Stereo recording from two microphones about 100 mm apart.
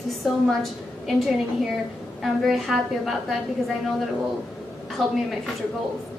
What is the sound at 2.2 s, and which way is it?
Speech, centre (ahead or behind).